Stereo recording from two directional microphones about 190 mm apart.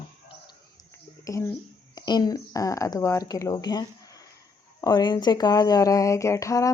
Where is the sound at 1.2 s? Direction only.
15° left (ahead or behind).